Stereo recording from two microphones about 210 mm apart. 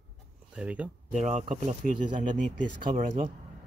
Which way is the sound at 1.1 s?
35° right (ahead or behind).